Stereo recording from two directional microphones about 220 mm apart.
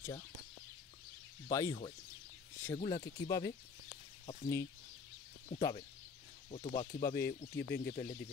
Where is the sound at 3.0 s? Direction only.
15° left (ahead or behind).